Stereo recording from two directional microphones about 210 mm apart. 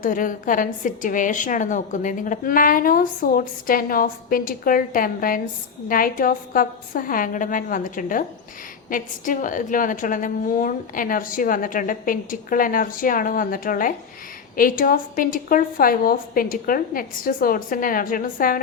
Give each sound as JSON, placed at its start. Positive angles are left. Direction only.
{"t": 0.0, "sound": "a woman's voice", "side_deg": 40}